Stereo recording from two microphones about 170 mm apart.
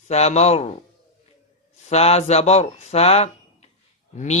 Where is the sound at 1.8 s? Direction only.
40° left (ahead or behind).